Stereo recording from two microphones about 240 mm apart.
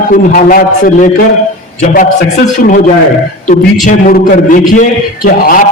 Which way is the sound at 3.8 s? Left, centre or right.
Left.